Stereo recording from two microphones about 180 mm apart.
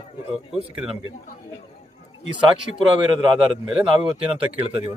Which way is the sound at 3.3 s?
25° right (ahead or behind).